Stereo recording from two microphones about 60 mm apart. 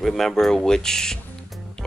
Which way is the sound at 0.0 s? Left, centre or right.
Centre.